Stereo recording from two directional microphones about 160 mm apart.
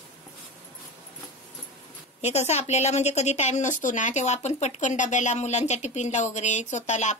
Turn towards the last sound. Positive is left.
turn(degrees=45)  # may be behind; listen again after turning